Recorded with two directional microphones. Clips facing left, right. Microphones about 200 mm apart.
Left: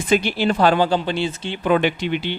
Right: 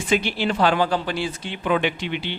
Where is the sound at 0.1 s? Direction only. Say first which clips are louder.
Left 4 dB; 40° left (ahead or behind); by 1.5 s 25° left (ahead or behind).